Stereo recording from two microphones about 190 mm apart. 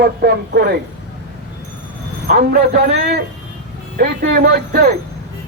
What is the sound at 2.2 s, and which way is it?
Speech, 50° right (ahead or behind).